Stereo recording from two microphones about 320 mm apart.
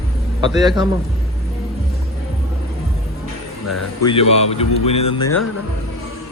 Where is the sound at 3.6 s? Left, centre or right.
Left.